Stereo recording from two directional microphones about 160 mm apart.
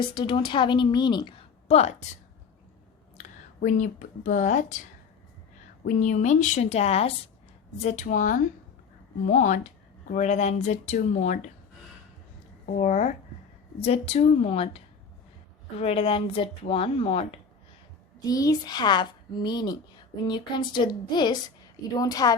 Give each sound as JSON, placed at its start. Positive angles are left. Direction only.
{"t": 0.0, "sound": "speech", "side_deg": 30}
{"t": 1.6, "sound": "a woman's voice", "side_deg": 40}
{"t": 3.2, "sound": "speech", "side_deg": 50}
{"t": 5.8, "sound": "speech", "side_deg": 50}
{"t": 8.0, "sound": "speech", "side_deg": 55}
{"t": 12.6, "sound": "speech", "side_deg": 55}
{"t": 13.8, "sound": "speech", "side_deg": 40}
{"t": 15.8, "sound": "speech", "side_deg": 35}
{"t": 18.3, "sound": "speech", "side_deg": 20}